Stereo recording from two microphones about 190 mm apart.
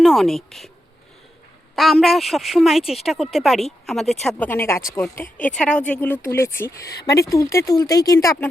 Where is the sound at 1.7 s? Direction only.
Centre (ahead or behind); by 5.2 s 15° left (ahead or behind).